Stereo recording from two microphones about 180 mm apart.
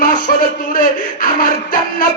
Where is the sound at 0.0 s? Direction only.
50° left (ahead or behind).